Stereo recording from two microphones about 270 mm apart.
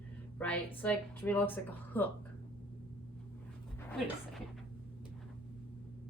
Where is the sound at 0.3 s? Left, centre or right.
Centre.